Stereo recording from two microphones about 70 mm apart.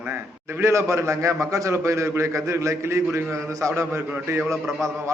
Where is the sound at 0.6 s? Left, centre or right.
Right.